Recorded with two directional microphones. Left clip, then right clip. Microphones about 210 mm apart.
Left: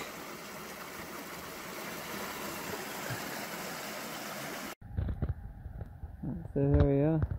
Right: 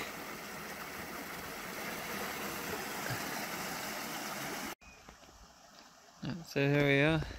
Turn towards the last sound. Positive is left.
turn(degrees=-10)  # may be behind; listen again after turning